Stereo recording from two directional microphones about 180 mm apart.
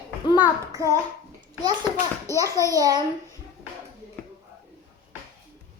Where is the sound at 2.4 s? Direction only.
15° left (ahead or behind).